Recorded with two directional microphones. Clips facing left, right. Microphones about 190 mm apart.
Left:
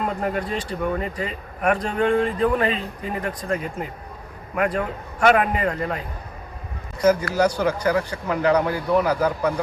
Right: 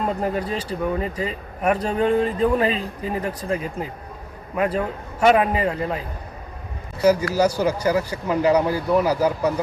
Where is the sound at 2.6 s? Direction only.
35° right (ahead or behind).